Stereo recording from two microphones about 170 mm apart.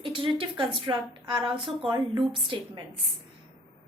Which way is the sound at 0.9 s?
30° right (ahead or behind).